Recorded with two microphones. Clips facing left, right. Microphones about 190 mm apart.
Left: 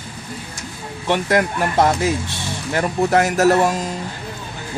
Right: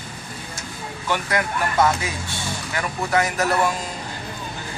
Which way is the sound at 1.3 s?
40° left (ahead or behind).